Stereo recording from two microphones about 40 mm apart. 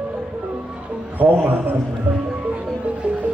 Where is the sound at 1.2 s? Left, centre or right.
Right.